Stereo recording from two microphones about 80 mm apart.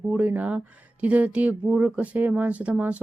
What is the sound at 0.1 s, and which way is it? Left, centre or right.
Speech, centre.